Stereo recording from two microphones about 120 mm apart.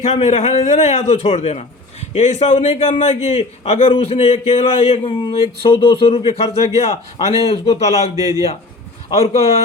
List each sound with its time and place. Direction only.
0.0 s a man's voice: 65° left (ahead or behind)
5.0 s a man's voice: 45° left (ahead or behind); by 8.1 s 65° left (ahead or behind)
8.1 s a man's voice: 30° right (ahead or behind)
9.1 s a man's voice: 60° left (ahead or behind)